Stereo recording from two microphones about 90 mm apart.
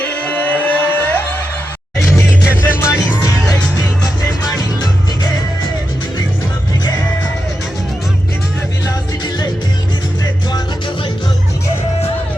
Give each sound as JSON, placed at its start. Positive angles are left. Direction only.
{"t": 0.0, "sound": "music", "side_deg": 15}
{"t": 3.2, "sound": "music", "side_deg": 40}
{"t": 8.9, "sound": "music", "side_deg": 45}